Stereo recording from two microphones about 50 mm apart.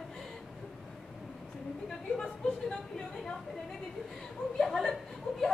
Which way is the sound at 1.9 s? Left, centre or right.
Centre.